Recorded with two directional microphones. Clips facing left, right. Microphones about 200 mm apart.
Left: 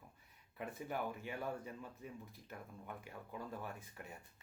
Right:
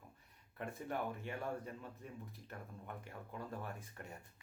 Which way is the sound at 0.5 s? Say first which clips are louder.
Right 1 dB; centre (ahead or behind).